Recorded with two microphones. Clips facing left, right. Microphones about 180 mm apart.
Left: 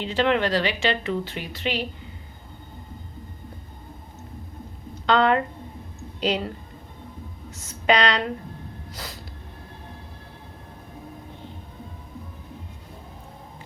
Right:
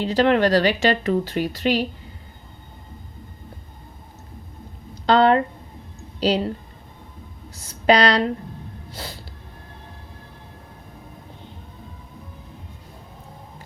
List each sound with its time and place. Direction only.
0.0 s speech: 40° right (ahead or behind)
5.0 s speech: 35° right (ahead or behind)
7.5 s a woman's voice: 35° right (ahead or behind)
8.9 s a sound: 30° right (ahead or behind)